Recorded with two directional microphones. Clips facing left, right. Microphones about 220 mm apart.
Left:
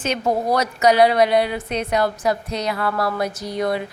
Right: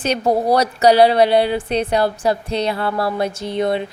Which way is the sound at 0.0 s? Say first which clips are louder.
Right 4 dB; 35° right (ahead or behind).